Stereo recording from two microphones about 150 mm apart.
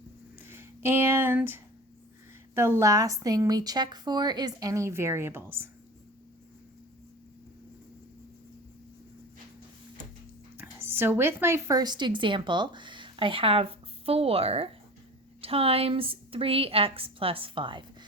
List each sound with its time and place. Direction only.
0.3 s a sound: 15° right (ahead or behind)
2.6 s a woman's voice: 15° right (ahead or behind)
10.6 s a woman's voice: 15° right (ahead or behind); by 17.8 s 35° right (ahead or behind)